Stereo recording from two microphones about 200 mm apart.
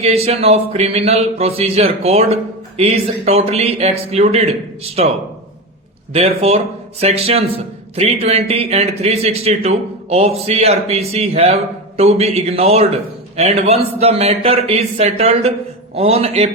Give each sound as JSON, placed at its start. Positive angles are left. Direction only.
{"t": 0.0, "sound": "a man's voice", "side_deg": -30}
{"t": 6.1, "sound": "a man's voice", "side_deg": -30}